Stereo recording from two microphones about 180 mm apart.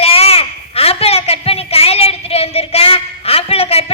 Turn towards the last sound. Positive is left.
turn(degrees=35)  # may be behind; listen again after turning